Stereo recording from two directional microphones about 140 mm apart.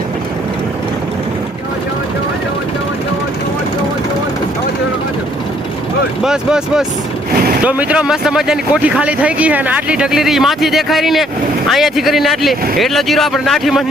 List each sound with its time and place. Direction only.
6.2 s speech: 5° right (ahead or behind)